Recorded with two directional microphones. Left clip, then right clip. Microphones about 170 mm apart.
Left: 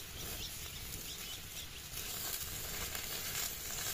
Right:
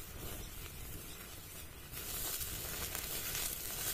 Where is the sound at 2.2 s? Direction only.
20° right (ahead or behind).